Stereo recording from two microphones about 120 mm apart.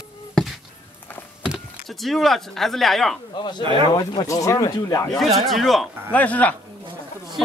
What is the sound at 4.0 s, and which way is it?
Speech, 30° left (ahead or behind).